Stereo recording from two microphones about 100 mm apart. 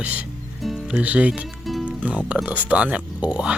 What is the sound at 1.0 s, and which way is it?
Speech, 15° right (ahead or behind).